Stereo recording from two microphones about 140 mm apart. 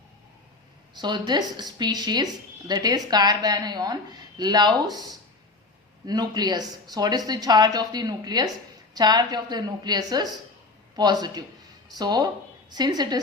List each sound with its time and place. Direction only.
0.9 s a woman's voice: 30° right (ahead or behind)
6.1 s a woman's voice: 30° right (ahead or behind)